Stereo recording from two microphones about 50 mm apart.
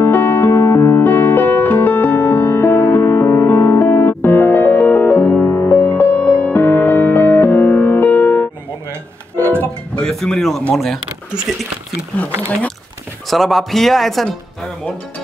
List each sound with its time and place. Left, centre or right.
0.0 s music: left
1.0 s music: left
6.0 s music: left
10.0 s music: centre
10.7 s speech: centre
13.3 s speech: centre